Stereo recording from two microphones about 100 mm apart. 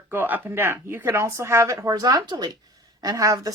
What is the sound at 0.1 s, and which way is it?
Speech, 20° right (ahead or behind).